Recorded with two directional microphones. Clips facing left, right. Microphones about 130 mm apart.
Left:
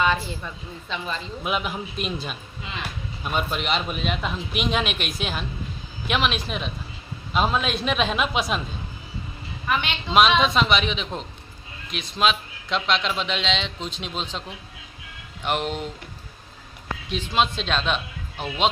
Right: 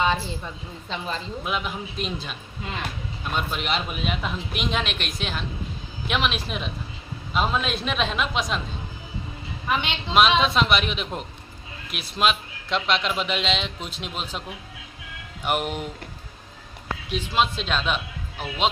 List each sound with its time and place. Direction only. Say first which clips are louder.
0.0 s a woman's voice: left 1 dB; 25° right (ahead or behind)
1.5 s a man's voice: left 3 dB; 5° left (ahead or behind)
9.6 s a woman's voice: even; 20° right (ahead or behind)
10.1 s a man's voice: left 1 dB; centre (ahead or behind)
15.4 s speech: even; 10° right (ahead or behind)
17.1 s a man's voice: left 1 dB; 5° right (ahead or behind)